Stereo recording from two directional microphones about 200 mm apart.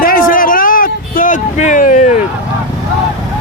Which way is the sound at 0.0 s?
45° left (ahead or behind).